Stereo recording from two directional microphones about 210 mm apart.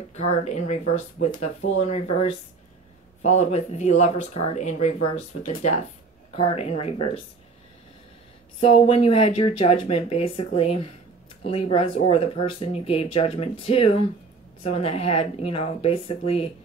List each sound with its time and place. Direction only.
0.1 s speech: 30° left (ahead or behind)
3.3 s speech: 35° left (ahead or behind)
6.3 s speech: 30° left (ahead or behind)
8.5 s speech: 30° left (ahead or behind)